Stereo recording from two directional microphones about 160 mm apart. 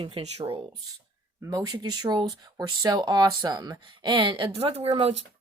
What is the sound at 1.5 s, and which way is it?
Speech, 25° right (ahead or behind).